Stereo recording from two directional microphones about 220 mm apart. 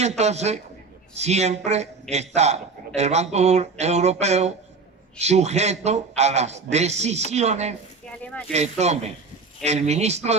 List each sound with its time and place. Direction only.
0.0 s a man's voice: 30° right (ahead or behind)
8.2 s speech: 5° left (ahead or behind)
8.5 s a man's voice: 30° right (ahead or behind)